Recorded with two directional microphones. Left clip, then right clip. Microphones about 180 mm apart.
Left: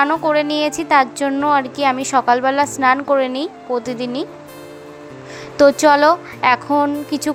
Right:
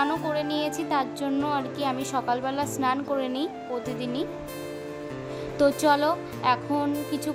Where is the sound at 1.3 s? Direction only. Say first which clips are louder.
Left 10 dB; 5° left (ahead or behind).